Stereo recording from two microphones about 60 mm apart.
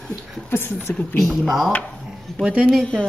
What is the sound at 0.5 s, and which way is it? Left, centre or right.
Speech, left.